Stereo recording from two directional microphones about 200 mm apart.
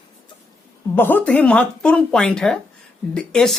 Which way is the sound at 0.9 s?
10° left (ahead or behind).